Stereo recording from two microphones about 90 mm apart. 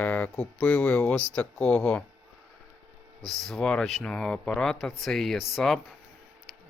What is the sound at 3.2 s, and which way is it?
Speech, 5° left (ahead or behind).